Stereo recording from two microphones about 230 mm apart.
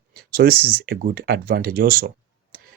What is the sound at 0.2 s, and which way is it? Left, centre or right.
Speech, right.